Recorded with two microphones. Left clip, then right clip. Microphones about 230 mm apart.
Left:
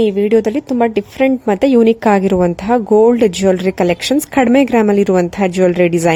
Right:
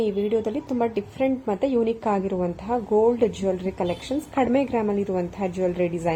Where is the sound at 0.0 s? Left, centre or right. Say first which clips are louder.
Left 11 dB; left.